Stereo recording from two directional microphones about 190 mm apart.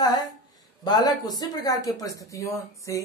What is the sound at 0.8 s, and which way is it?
A woman's voice, 20° left (ahead or behind).